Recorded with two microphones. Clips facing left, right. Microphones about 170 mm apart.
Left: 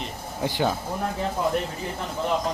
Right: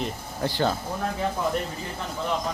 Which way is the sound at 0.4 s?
15° left (ahead or behind).